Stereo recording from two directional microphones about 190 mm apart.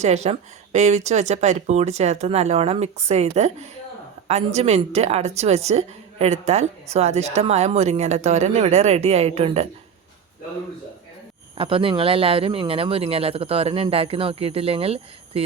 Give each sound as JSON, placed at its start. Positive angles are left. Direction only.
{"t": 0.0, "sound": "a woman's voice", "side_deg": -35}
{"t": 11.5, "sound": "speech", "side_deg": -30}